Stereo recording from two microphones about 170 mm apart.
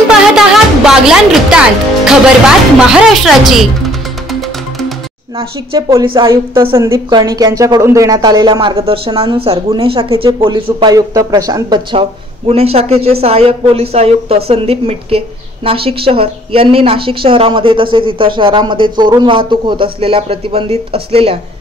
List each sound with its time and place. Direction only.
0.4 s music: 5° right (ahead or behind)
2.0 s speech: 5° right (ahead or behind)
4.3 s music: centre (ahead or behind)
5.4 s a woman's voice: 25° right (ahead or behind)